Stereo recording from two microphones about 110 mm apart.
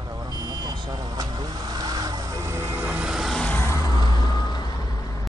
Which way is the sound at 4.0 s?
40° left (ahead or behind).